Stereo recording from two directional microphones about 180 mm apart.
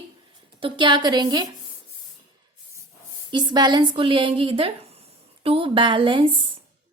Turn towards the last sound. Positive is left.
turn(degrees=-30)  # may be behind; listen again after turning